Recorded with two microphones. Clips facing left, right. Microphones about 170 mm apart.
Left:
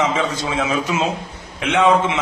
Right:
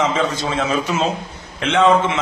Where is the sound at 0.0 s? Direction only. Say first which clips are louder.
Right 1 dB; 10° left (ahead or behind).